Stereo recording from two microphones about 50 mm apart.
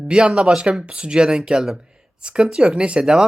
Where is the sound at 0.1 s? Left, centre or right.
Centre.